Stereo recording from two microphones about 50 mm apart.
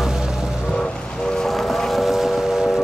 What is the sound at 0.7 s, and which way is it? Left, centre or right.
Train, centre.